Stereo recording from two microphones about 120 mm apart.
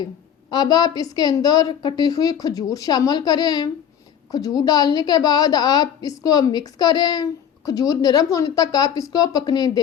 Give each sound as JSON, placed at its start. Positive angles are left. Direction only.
{"t": 0.5, "sound": "a woman's voice", "side_deg": 35}